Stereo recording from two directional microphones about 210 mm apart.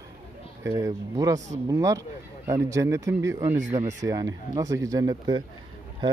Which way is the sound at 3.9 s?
15° right (ahead or behind).